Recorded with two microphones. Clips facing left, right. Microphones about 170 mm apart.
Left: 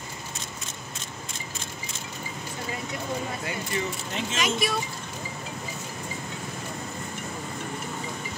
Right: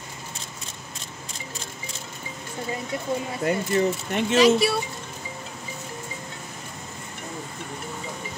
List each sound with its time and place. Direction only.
3.4 s speech: 55° right (ahead or behind)
4.4 s speech: 30° right (ahead or behind)